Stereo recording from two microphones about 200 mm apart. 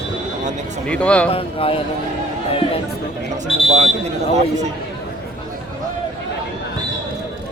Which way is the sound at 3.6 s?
30° right (ahead or behind).